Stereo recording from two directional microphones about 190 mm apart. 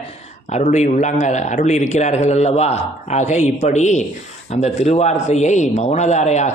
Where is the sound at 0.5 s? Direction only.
40° left (ahead or behind).